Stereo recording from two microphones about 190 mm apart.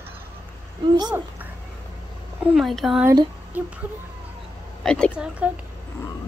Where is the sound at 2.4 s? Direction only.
Centre (ahead or behind).